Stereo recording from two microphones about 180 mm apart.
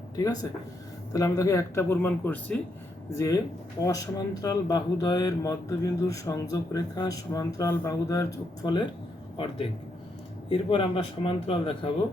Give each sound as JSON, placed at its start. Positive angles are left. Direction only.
{"t": 1.1, "sound": "speech", "side_deg": 20}
{"t": 10.5, "sound": "speech", "side_deg": 30}